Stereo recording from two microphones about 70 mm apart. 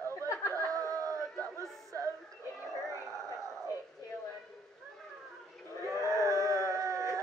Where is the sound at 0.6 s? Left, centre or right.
Right.